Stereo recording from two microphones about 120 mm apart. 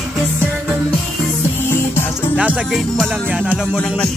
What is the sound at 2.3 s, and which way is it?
Music, 10° right (ahead or behind).